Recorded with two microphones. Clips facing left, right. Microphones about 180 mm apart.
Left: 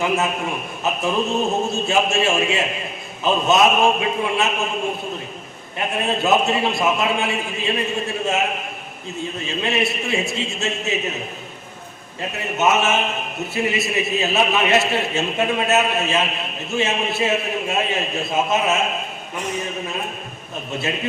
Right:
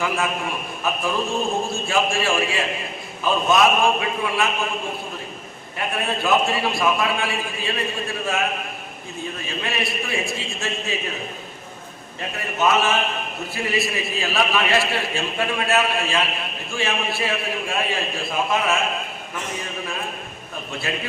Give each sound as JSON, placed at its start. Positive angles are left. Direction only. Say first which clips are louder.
{"t": 1.0, "sound": "a man's voice", "louder": "left 4 dB", "side_deg": 25}
{"t": 5.9, "sound": "a man's voice", "louder": "left 2 dB", "side_deg": 25}
{"t": 12.5, "sound": "a man's voice", "louder": "left 1 dB", "side_deg": 25}